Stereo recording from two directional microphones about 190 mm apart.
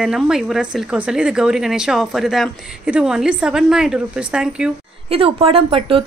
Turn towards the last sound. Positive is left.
turn(degrees=-30)  # may be behind; listen again after turning